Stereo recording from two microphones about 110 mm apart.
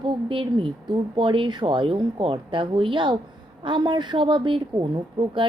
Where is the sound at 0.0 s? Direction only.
50° right (ahead or behind).